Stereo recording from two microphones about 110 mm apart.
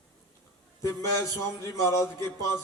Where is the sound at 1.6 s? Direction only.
30° left (ahead or behind).